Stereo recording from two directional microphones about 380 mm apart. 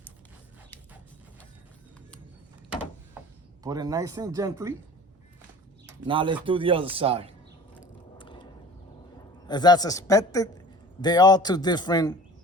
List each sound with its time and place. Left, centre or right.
3.6 s a man's voice: centre
6.1 s a man's voice: centre
8.2 s a sound: centre
9.5 s speech: centre